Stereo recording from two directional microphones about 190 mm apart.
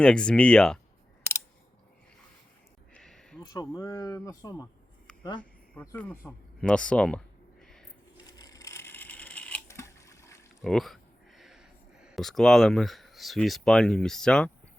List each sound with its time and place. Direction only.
0.0 s speech: 5° left (ahead or behind)
2.9 s a sound: centre (ahead or behind)
3.4 s speech: 20° left (ahead or behind)
7.6 s a sound: 5° left (ahead or behind)
8.3 s camera: 20° left (ahead or behind)
10.6 s speech: centre (ahead or behind)